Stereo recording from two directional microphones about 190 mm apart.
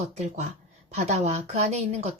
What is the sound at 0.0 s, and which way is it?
A woman's voice, 35° right (ahead or behind).